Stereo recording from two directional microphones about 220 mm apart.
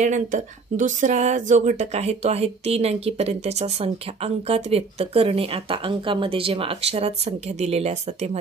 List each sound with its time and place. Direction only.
0.0 s speech: 35° right (ahead or behind)